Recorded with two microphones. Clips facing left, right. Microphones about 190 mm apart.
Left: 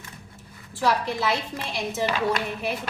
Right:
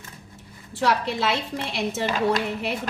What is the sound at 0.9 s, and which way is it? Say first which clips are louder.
Speech: even; 65° right (ahead or behind).